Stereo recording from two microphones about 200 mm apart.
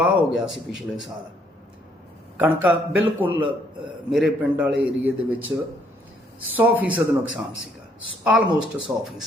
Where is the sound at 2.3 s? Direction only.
10° right (ahead or behind).